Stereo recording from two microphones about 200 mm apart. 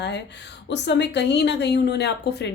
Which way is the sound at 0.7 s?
60° left (ahead or behind).